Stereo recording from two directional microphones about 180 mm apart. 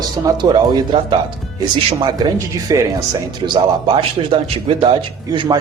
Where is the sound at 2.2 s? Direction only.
20° right (ahead or behind).